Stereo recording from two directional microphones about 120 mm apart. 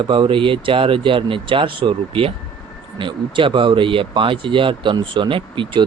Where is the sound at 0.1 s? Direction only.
45° right (ahead or behind).